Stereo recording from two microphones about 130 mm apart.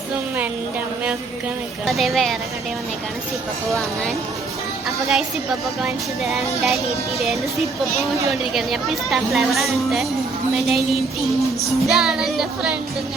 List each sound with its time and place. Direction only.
1.9 s speech: centre (ahead or behind)
3.7 s speech: centre (ahead or behind)
8.3 s speech: centre (ahead or behind)